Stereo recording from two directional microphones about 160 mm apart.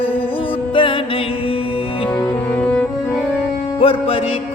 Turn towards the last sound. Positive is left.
turn(degrees=35)  # may be behind; listen again after turning